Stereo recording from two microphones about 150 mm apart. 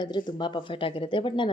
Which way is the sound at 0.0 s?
30° left (ahead or behind).